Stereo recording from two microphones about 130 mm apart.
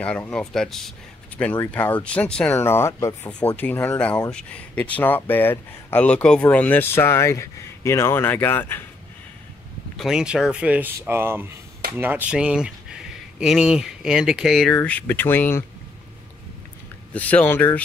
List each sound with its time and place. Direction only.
0.0 s speech: 10° left (ahead or behind)
2.6 s speech: 20° left (ahead or behind)
3.3 s speech: 10° left (ahead or behind)
9.9 s speech: 5° right (ahead or behind)
14.7 s speech: 10° left (ahead or behind)
17.1 s speech: 10° left (ahead or behind)